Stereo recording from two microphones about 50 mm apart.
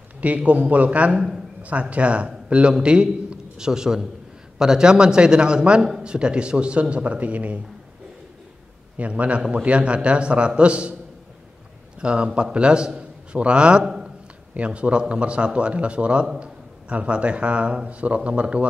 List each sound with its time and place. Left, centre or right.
0.2 s a man's voice: right
8.9 s a man's voice: right
12.0 s a man's voice: right
14.5 s a man's voice: right